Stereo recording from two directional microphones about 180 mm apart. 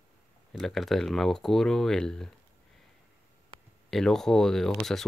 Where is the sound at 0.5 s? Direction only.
Centre (ahead or behind).